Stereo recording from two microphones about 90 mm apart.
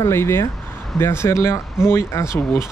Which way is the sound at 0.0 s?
30° left (ahead or behind).